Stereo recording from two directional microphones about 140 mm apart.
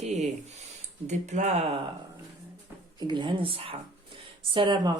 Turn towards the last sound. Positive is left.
turn(degrees=-35)  # may be behind; listen again after turning